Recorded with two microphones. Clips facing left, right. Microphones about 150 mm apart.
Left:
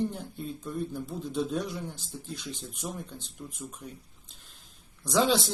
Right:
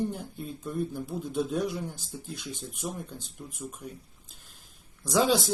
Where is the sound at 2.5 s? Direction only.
50° right (ahead or behind).